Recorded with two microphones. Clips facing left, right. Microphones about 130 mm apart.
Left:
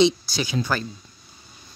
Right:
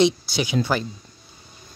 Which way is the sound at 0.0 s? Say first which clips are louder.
Even; 20° right (ahead or behind).